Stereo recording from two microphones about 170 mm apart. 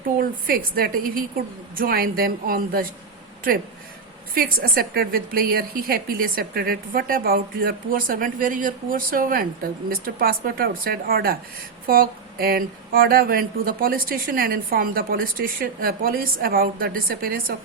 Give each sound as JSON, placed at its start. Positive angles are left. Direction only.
{"t": 0.2, "sound": "speech", "side_deg": -60}
{"t": 4.4, "sound": "speech", "side_deg": -60}